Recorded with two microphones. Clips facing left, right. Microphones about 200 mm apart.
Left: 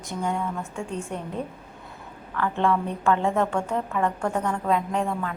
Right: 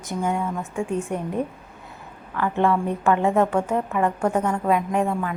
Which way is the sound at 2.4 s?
15° right (ahead or behind).